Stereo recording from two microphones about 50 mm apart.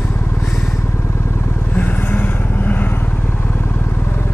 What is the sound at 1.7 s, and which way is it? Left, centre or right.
Vehicle, left.